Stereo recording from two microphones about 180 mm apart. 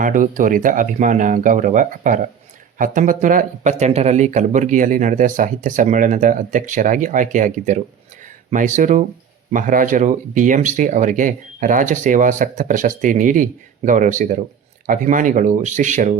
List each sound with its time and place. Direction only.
0.0 s speech: 45° right (ahead or behind)